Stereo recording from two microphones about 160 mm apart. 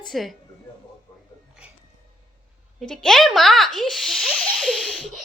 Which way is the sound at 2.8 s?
Centre (ahead or behind).